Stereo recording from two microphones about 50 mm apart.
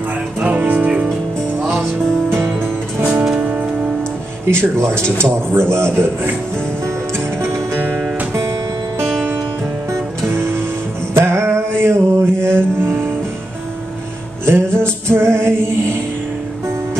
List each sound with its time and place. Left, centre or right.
0.4 s music: right
2.2 s music: right
3.1 s music: right
4.5 s speech: right
7.4 s music: right
10.3 s music: right
14.4 s music: right